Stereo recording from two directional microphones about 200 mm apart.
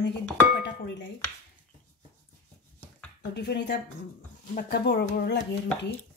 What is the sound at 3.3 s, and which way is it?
Speech, 55° left (ahead or behind).